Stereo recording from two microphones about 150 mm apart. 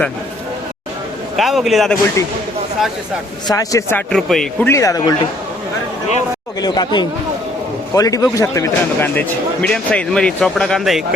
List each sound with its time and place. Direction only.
1.4 s a man's voice: centre (ahead or behind)
3.4 s speech: 25° left (ahead or behind)
4.1 s a man's voice: 5° left (ahead or behind)
4.7 s speech: 20° left (ahead or behind)
6.6 s speech: 30° left (ahead or behind); by 11.0 s centre (ahead or behind)